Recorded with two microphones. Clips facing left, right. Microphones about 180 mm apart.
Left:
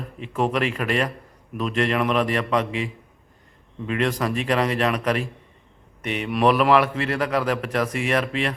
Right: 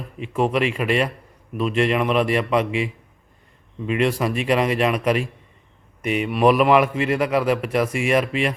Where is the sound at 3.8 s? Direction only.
10° right (ahead or behind).